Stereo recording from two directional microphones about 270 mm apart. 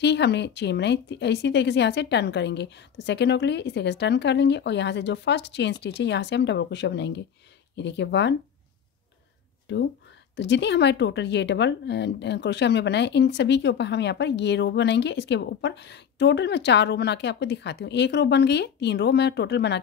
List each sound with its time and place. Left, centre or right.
0.0 s speech: left
9.7 s speech: left